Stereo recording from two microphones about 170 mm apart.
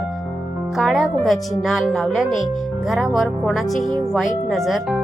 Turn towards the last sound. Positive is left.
turn(degrees=0)  # may be behind; listen again after turning